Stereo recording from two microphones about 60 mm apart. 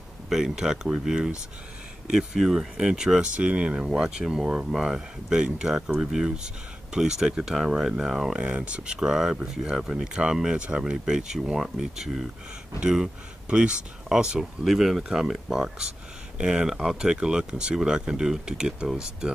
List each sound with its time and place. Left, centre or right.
0.3 s speech: centre
8.4 s speech: centre